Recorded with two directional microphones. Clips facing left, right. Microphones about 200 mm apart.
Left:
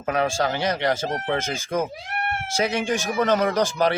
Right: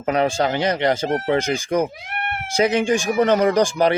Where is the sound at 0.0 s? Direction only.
20° right (ahead or behind).